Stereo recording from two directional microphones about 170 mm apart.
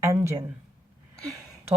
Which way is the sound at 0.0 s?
15° right (ahead or behind).